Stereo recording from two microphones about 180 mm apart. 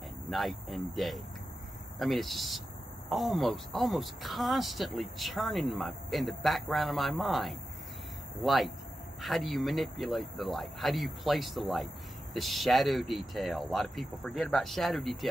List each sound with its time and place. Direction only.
0.3 s speech: centre (ahead or behind)